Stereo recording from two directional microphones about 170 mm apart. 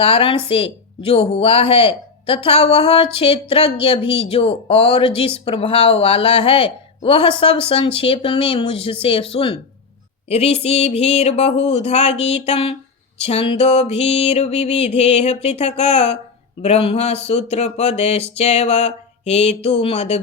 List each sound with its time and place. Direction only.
0.0 s speech: 35° left (ahead or behind)